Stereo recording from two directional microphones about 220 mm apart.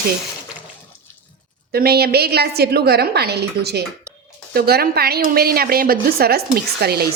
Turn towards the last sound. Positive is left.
turn(degrees=-45)  # may be behind; listen again after turning